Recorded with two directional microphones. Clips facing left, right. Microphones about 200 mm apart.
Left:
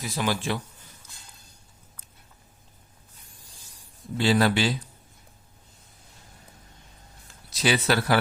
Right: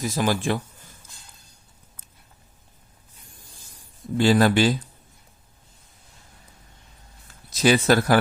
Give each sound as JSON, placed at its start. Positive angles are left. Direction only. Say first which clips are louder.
{"t": 0.0, "sound": "speech", "louder": "right 4 dB", "side_deg": -45}
{"t": 4.2, "sound": "speech", "louder": "right 4 dB", "side_deg": -45}
{"t": 7.5, "sound": "speech", "louder": "right 6 dB", "side_deg": -45}